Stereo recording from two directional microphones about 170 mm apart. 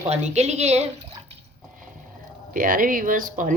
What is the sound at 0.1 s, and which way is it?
Speech, 40° right (ahead or behind).